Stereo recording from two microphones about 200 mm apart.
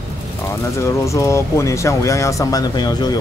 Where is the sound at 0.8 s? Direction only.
15° left (ahead or behind).